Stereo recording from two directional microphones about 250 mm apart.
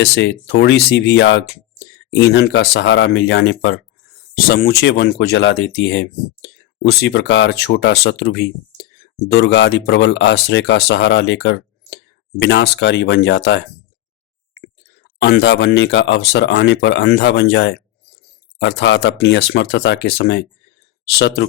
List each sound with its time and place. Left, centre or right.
0.0 s speech: left